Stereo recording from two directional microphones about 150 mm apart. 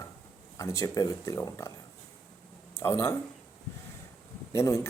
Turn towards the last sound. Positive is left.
turn(degrees=20)  # may be behind; listen again after turning